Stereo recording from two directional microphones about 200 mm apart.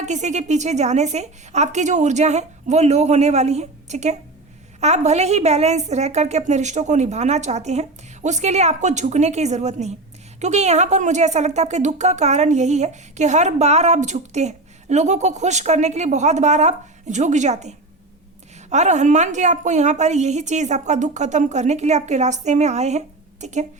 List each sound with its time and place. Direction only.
0.0 s speech: 35° right (ahead or behind)